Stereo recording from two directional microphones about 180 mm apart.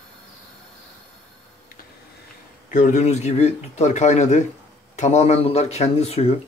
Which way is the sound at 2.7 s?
45° left (ahead or behind).